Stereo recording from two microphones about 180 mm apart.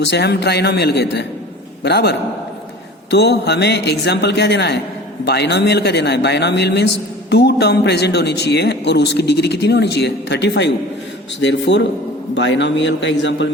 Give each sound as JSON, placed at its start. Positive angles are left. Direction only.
{"t": 0.0, "sound": "a man's voice", "side_deg": 70}